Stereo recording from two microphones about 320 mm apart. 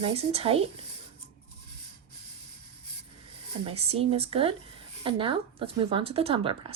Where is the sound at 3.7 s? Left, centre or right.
Centre.